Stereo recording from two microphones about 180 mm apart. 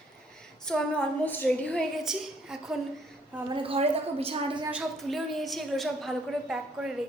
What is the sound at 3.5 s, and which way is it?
Speech, 30° right (ahead or behind).